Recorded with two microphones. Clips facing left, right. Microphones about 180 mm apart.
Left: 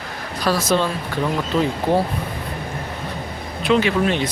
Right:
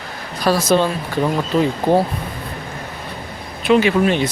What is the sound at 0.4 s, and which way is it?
Speech, 35° right (ahead or behind).